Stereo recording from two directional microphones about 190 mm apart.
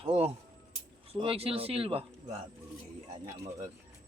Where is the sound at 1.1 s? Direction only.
30° right (ahead or behind).